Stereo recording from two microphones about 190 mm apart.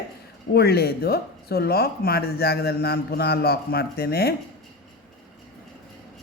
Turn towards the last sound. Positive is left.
turn(degrees=55)  # may be behind; listen again after turning